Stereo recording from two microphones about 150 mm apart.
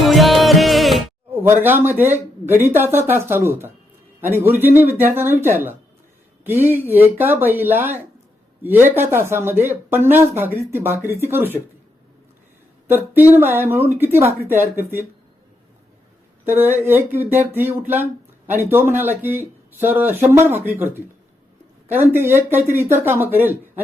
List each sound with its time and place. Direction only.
0.0 s music: centre (ahead or behind)
1.3 s speech: 15° right (ahead or behind)
12.9 s speech: 15° right (ahead or behind)
16.6 s speech: 15° right (ahead or behind)
22.1 s speech: 15° right (ahead or behind)